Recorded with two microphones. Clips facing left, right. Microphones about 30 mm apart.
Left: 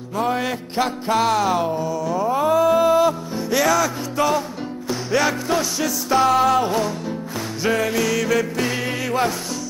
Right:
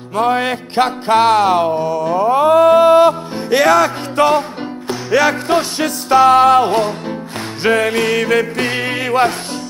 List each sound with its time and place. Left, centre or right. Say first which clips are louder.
0.1 s music: right 6 dB; right